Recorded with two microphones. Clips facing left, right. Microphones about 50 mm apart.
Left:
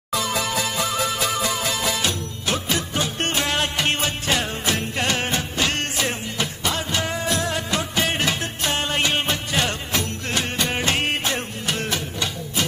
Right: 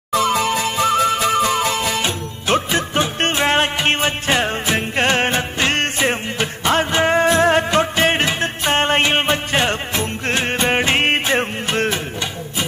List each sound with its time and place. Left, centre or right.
0.1 s music: right
2.0 s music: right